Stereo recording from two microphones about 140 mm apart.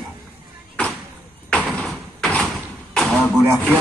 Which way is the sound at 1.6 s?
Centre (ahead or behind).